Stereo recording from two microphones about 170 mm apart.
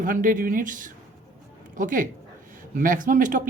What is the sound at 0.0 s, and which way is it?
A man's voice, 50° right (ahead or behind).